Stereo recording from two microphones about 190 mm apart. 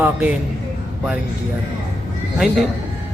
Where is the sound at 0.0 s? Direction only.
10° right (ahead or behind).